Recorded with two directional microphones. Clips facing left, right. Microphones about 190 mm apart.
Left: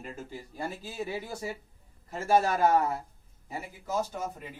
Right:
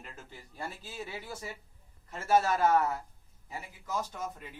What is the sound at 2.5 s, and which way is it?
A man's voice, 35° left (ahead or behind).